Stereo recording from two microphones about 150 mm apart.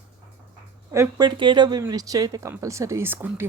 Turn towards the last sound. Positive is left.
turn(degrees=-15)  # may be behind; listen again after turning